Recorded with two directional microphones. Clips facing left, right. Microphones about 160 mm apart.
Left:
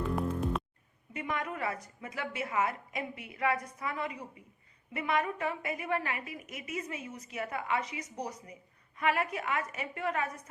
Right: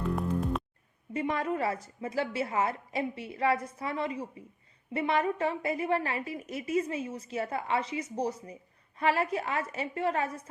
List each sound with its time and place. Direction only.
1.1 s a woman's voice: 30° right (ahead or behind)